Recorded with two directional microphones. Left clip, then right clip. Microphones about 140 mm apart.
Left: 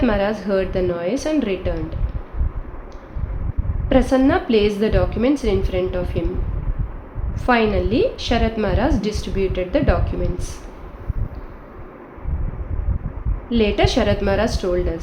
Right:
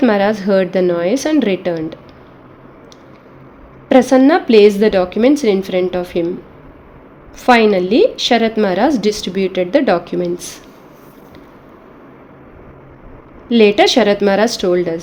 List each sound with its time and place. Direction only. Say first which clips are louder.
0.0 s a woman's voice: right 6 dB; 70° right (ahead or behind)
3.8 s a woman's voice: right 7 dB; 70° right (ahead or behind)
7.4 s a woman's voice: right 7 dB; 70° right (ahead or behind)
13.5 s a woman's voice: right 8 dB; 75° right (ahead or behind)